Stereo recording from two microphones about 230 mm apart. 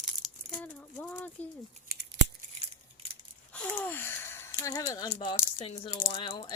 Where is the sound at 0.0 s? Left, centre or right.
Centre.